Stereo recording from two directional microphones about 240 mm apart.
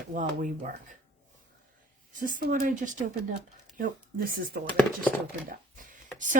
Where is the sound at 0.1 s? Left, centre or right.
Right.